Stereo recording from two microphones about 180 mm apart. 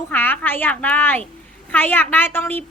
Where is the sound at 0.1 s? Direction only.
10° left (ahead or behind).